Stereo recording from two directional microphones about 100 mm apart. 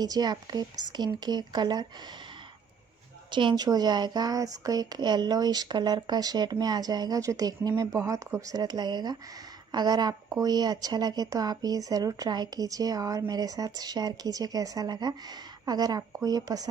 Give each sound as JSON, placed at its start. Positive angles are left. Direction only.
{"t": 0.0, "sound": "speech", "side_deg": -45}
{"t": 3.3, "sound": "a woman's voice", "side_deg": -50}